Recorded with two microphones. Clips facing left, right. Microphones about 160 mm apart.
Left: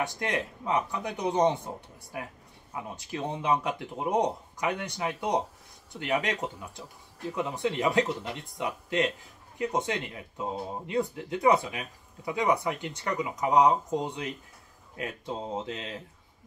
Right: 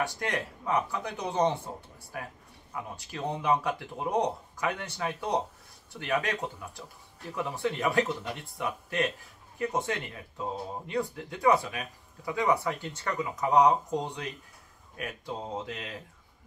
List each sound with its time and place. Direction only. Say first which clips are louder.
0.0 s speech: left 1 dB; 20° left (ahead or behind)